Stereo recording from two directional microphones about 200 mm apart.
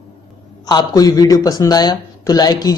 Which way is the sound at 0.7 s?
20° left (ahead or behind).